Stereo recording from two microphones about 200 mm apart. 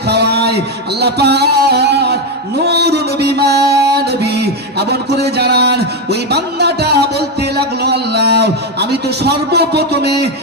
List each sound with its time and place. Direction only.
0.1 s a man's voice: 55° right (ahead or behind)
2.6 s music: 55° right (ahead or behind)